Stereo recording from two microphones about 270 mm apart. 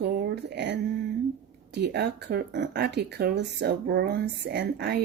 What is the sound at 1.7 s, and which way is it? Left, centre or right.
Speech, right.